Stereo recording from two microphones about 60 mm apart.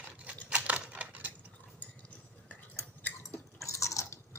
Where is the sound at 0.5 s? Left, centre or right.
Right.